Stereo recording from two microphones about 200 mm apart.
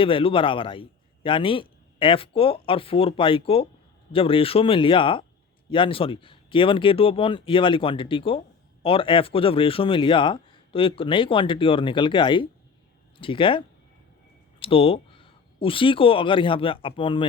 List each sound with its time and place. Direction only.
0.0 s a man's voice: 25° left (ahead or behind)